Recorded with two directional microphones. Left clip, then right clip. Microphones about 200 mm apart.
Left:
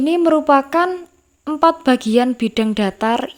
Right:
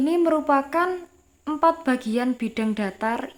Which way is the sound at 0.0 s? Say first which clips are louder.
Left 6 dB; 30° left (ahead or behind).